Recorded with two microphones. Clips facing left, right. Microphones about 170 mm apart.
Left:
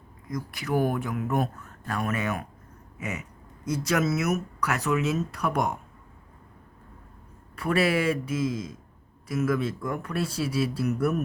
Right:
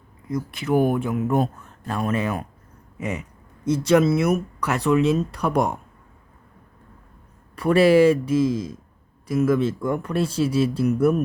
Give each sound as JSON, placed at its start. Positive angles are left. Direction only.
{"t": 0.3, "sound": "speech", "side_deg": -25}
{"t": 7.5, "sound": "speech", "side_deg": -35}